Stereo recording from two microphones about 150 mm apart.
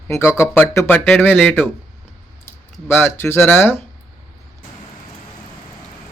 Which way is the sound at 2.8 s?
15° left (ahead or behind).